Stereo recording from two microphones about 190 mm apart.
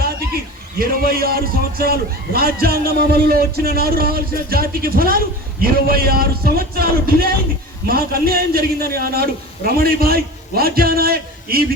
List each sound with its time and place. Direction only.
0.8 s a man's voice: 55° right (ahead or behind)